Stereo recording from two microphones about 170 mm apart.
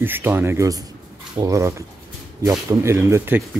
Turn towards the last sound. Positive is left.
turn(degrees=-15)  # may be behind; listen again after turning